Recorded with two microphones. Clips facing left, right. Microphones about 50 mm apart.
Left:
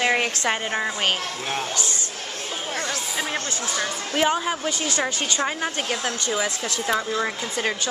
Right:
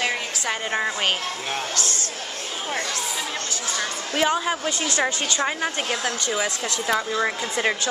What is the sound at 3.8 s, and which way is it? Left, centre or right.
Speech, centre.